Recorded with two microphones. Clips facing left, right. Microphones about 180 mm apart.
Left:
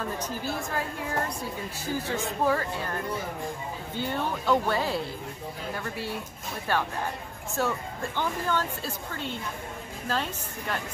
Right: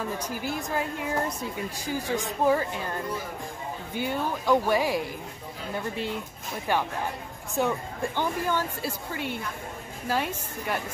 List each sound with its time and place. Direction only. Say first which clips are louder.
0.2 s a woman's voice: even; 15° right (ahead or behind)
3.9 s a woman's voice: right 1 dB; 10° right (ahead or behind)
6.7 s a woman's voice: right 1 dB; 15° right (ahead or behind)